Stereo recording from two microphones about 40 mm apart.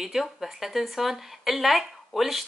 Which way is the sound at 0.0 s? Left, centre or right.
Centre.